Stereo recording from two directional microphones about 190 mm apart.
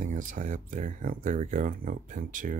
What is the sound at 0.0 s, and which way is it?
Speech, 45° right (ahead or behind).